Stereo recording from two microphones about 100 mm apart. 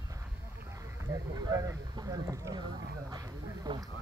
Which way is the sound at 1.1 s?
35° right (ahead or behind).